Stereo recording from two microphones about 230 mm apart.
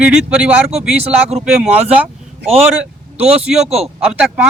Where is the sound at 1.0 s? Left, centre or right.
Right.